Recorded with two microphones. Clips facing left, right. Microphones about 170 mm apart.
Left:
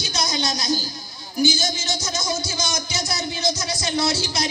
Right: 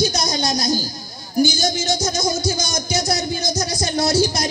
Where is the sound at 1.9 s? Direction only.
40° right (ahead or behind).